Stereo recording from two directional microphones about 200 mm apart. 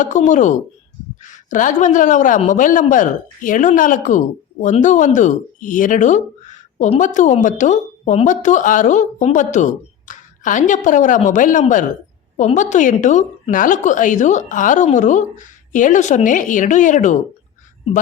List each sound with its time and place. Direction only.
0.0 s a woman's voice: 40° left (ahead or behind)